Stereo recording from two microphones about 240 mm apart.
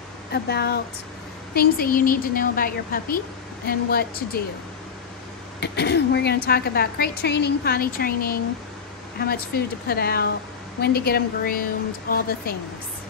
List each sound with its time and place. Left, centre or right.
0.3 s a woman's voice: left
5.6 s a woman's voice: left